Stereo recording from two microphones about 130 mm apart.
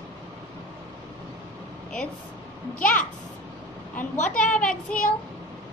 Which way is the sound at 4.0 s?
80° left.